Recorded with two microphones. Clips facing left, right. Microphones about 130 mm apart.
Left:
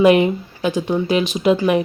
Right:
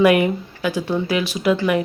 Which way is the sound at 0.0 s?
25° left (ahead or behind).